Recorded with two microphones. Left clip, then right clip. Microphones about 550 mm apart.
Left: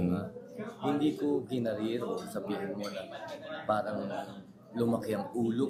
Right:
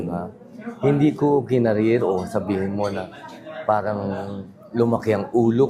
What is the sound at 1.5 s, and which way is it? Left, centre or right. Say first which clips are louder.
Speech: right 15 dB; right.